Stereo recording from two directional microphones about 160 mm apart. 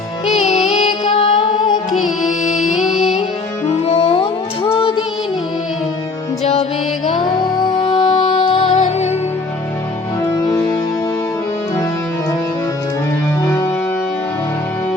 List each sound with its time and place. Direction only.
0.3 s music: 45° left (ahead or behind)
1.9 s music: centre (ahead or behind)
3.7 s music: 40° left (ahead or behind)
6.4 s music: 40° left (ahead or behind)
7.2 s music: 25° left (ahead or behind)
8.7 s music: 45° left (ahead or behind)